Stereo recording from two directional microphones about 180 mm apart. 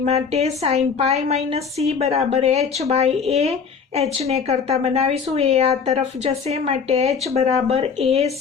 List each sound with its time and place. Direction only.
0.0 s a woman's voice: 35° right (ahead or behind)